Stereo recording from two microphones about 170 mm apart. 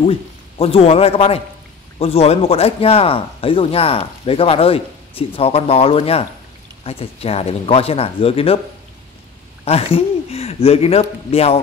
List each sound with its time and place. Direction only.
0.0 s a man's voice: 35° left (ahead or behind)
9.7 s speech: 35° left (ahead or behind)